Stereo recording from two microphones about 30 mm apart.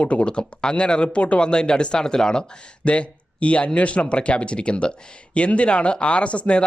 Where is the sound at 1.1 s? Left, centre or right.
Left.